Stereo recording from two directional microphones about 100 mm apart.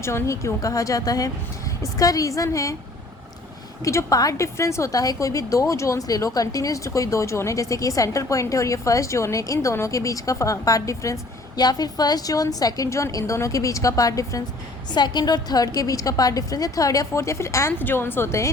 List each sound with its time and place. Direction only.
0.0 s a woman's voice: 25° left (ahead or behind)
3.8 s a woman's voice: 35° left (ahead or behind)
14.9 s a woman's voice: 45° left (ahead or behind); by 18.5 s 30° left (ahead or behind)